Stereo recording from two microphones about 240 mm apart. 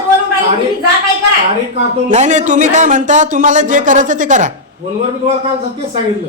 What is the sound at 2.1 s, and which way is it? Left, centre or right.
Speech, right.